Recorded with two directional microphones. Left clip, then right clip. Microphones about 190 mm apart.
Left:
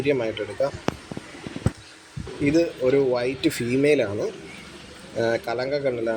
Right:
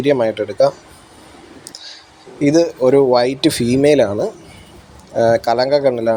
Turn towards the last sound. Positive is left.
turn(degrees=-35)  # may be behind; listen again after turning